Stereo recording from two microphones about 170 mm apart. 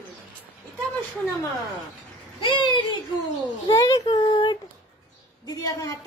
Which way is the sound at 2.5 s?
25° left (ahead or behind).